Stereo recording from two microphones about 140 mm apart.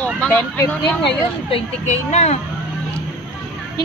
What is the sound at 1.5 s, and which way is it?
Speech, 55° left (ahead or behind).